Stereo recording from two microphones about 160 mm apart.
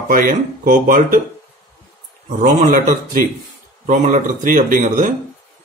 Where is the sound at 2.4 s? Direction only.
60° right (ahead or behind).